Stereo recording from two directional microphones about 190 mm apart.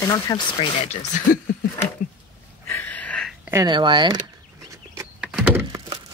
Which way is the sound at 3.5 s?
25° right (ahead or behind).